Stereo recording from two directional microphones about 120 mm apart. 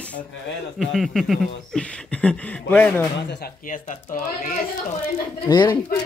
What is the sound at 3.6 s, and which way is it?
Speech, 90° left.